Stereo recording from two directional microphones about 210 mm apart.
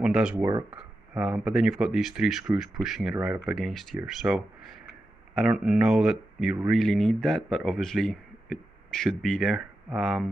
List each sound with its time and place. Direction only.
0.0 s speech: 5° right (ahead or behind)
0.5 s speech: 20° right (ahead or behind)
0.7 s speech: 5° right (ahead or behind)